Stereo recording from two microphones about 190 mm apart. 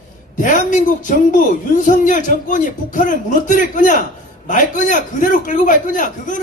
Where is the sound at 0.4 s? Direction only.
45° left (ahead or behind).